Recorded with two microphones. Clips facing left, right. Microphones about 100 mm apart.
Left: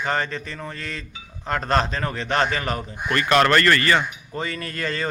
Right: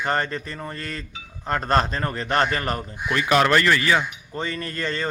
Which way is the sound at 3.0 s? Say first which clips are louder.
Left 1 dB; 5° right (ahead or behind).